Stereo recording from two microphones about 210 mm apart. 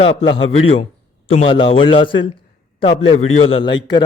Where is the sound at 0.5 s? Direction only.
30° left (ahead or behind).